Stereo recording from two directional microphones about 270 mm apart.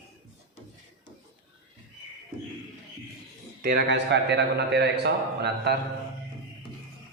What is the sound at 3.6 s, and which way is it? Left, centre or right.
A man's voice, right.